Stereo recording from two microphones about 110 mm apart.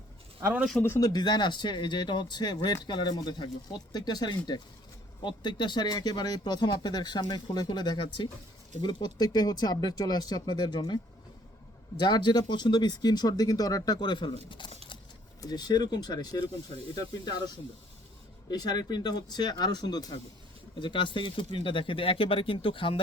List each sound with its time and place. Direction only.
0.8 s speech: 25° left (ahead or behind); by 14.7 s 50° left (ahead or behind)
15.4 s speech: 40° left (ahead or behind)
18.5 s speech: 35° left (ahead or behind); by 23.0 s 55° left (ahead or behind)